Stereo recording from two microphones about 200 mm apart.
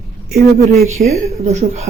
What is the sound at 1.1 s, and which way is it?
Speech, 30° right (ahead or behind).